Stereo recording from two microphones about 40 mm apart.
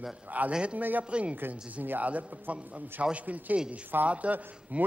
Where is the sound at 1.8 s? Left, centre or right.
Right.